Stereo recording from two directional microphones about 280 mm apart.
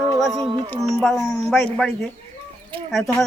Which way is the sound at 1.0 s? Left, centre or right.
Centre.